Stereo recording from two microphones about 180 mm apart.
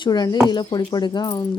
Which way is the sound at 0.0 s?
25° left (ahead or behind).